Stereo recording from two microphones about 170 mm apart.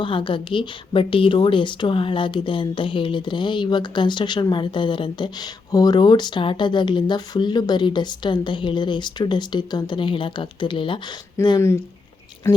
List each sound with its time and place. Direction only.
0.0 s a woman's voice: 30° left (ahead or behind)